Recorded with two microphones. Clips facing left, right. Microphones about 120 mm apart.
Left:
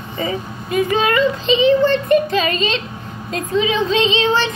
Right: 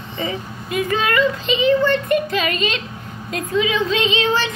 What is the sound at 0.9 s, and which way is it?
Speech, 25° left (ahead or behind).